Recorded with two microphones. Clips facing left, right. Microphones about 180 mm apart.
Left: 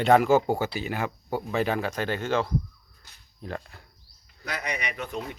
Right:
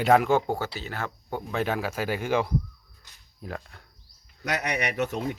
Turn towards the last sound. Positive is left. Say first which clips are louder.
# right 5 dB
turn(degrees=-70)  # may be behind; listen again after turning